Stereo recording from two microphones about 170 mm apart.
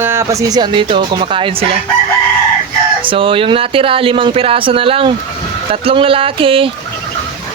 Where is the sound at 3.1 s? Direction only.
30° right (ahead or behind).